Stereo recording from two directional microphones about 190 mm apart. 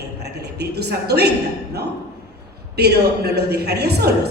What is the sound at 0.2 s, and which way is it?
A woman's voice, 60° right (ahead or behind).